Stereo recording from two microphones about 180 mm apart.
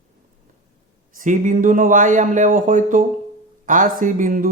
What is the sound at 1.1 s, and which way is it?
Speech, 45° right (ahead or behind).